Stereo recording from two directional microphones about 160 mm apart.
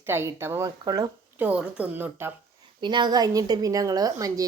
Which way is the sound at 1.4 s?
10° right (ahead or behind).